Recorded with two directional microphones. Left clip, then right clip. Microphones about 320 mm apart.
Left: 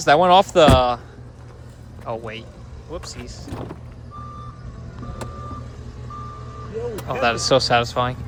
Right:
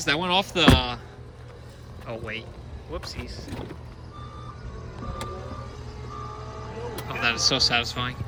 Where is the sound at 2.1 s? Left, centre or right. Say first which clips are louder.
Left 5 dB; centre.